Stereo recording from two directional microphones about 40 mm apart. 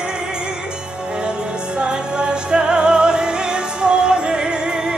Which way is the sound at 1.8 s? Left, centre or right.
Right.